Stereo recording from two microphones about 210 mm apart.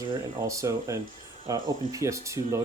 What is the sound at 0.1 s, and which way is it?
Speech, 15° right (ahead or behind).